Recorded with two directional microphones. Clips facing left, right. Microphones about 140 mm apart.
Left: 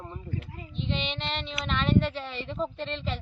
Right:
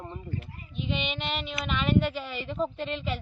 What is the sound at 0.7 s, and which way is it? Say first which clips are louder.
Child singing: right 1 dB; 5° right (ahead or behind).